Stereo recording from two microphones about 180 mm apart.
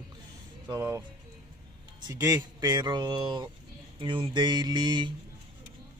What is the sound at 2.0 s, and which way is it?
Speech, 20° right (ahead or behind).